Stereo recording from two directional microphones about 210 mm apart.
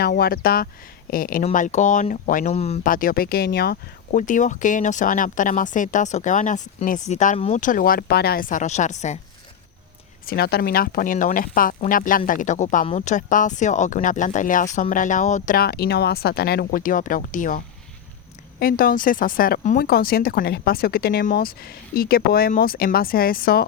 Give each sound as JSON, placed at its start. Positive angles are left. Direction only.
{"t": 0.0, "sound": "speech", "side_deg": 45}
{"t": 10.2, "sound": "speech", "side_deg": 45}
{"t": 18.6, "sound": "speech", "side_deg": 40}